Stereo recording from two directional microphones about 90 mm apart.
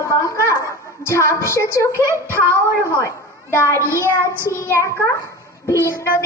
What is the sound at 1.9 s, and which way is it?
Speech, 30° right (ahead or behind).